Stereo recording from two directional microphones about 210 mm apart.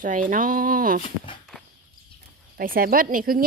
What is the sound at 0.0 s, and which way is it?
Speech, 40° right (ahead or behind).